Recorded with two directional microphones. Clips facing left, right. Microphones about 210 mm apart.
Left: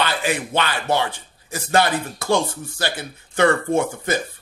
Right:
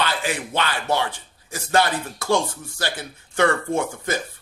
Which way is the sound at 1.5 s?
20° left (ahead or behind).